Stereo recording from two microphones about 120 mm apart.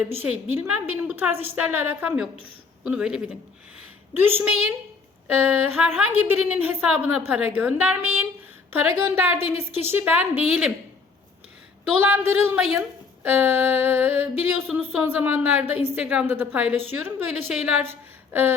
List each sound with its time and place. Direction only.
0.0 s a woman's voice: 15° right (ahead or behind)
4.2 s a woman's voice: 20° right (ahead or behind)
10.4 s a woman's voice: 5° right (ahead or behind)
12.0 s a woman's voice: 15° right (ahead or behind)